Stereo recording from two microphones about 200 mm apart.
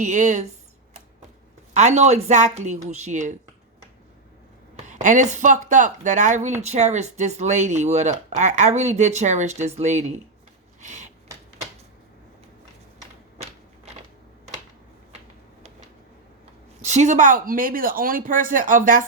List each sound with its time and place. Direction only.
0.0 s speech: 35° right (ahead or behind)
1.7 s speech: 35° right (ahead or behind)
4.9 s speech: 40° right (ahead or behind)
10.8 s rub: 35° right (ahead or behind)
16.8 s speech: 35° right (ahead or behind)